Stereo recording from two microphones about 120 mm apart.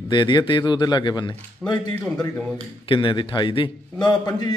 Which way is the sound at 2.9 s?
40° left (ahead or behind).